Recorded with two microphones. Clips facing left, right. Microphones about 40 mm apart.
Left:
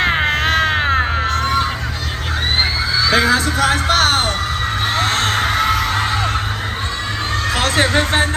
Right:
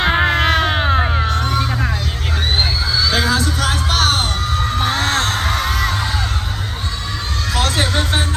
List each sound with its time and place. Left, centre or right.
3.0 s music: left
4.9 s heart sounds: left
7.5 s vehicle: left